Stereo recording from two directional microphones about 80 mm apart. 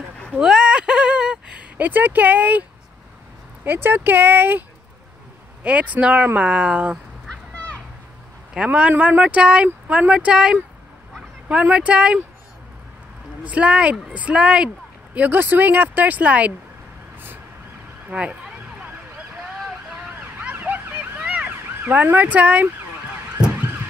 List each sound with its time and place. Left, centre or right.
0.4 s a sound: centre
3.6 s speech: right
8.5 s speech: centre
13.4 s speech: centre
18.1 s speech: centre
20.2 s ambulance: right